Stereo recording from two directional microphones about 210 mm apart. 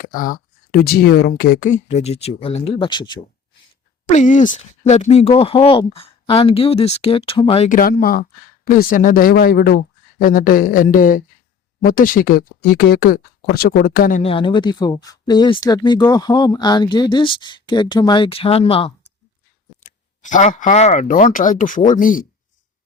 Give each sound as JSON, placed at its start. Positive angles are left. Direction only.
{"t": 0.0, "sound": "speech", "side_deg": 40}
{"t": 4.0, "sound": "speech", "side_deg": 35}
{"t": 14.2, "sound": "speech", "side_deg": 25}